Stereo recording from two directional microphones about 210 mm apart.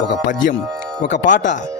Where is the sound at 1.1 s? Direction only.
35° left (ahead or behind).